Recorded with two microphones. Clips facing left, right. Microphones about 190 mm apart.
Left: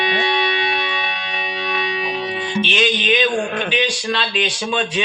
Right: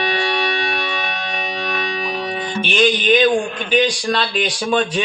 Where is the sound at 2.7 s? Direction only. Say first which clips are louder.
Right 6 dB; 45° right (ahead or behind).